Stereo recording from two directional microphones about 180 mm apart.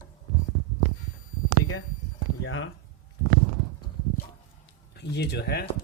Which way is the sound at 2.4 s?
90° left.